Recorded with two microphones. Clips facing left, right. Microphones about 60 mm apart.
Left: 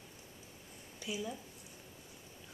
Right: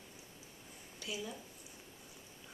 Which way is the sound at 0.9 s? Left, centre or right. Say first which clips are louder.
Left 2 dB; centre.